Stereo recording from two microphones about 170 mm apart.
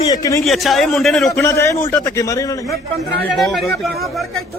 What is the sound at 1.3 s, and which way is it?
A man's voice, 15° left (ahead or behind).